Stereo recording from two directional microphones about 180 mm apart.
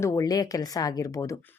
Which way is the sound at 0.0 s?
20° left (ahead or behind).